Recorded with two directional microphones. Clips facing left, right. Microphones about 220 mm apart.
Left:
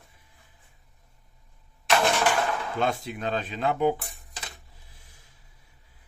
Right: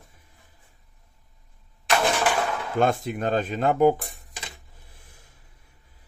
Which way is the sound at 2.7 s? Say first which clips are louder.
Right 9 dB; 50° right (ahead or behind).